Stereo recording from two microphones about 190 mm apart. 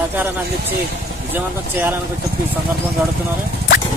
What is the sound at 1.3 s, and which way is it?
Speech, 10° right (ahead or behind).